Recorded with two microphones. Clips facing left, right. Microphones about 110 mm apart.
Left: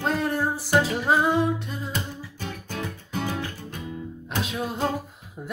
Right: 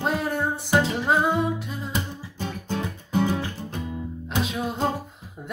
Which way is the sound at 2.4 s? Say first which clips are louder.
Right 4 dB; 20° right (ahead or behind).